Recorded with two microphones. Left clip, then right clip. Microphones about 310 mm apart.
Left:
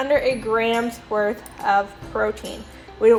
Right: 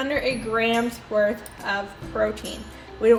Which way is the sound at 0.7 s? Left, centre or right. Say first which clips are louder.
Even; left.